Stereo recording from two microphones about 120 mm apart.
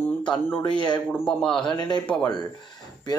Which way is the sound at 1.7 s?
40° left (ahead or behind).